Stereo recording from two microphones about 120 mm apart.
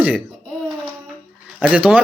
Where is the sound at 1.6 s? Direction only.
10° right (ahead or behind).